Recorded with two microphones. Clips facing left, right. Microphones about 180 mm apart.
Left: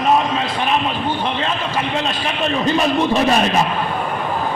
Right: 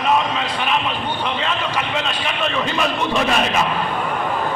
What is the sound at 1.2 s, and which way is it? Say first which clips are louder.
A man's voice: left 1 dB; 35° left (ahead or behind).